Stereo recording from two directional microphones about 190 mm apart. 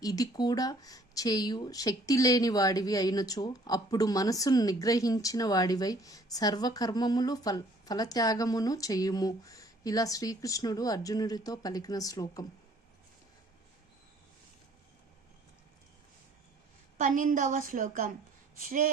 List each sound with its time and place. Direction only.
0.0 s speech: 20° left (ahead or behind)
17.0 s a woman's voice: 45° right (ahead or behind)